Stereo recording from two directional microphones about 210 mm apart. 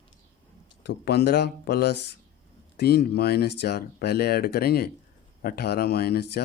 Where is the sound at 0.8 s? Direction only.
50° left (ahead or behind).